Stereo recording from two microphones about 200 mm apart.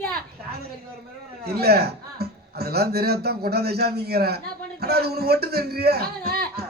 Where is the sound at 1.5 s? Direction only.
50° right (ahead or behind).